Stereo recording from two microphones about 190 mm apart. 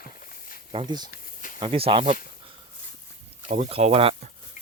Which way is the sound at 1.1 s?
45° left (ahead or behind).